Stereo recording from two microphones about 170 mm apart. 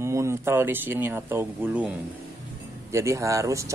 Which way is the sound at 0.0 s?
15° right (ahead or behind).